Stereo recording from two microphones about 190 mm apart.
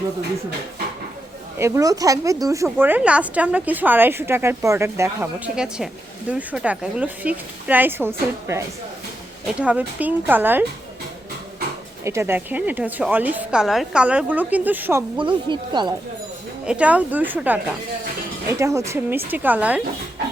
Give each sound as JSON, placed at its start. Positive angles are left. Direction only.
{"t": 1.5, "sound": "speech", "side_deg": -15}
{"t": 12.0, "sound": "speech", "side_deg": -15}
{"t": 15.2, "sound": "speech", "side_deg": -25}
{"t": 16.6, "sound": "speech", "side_deg": -5}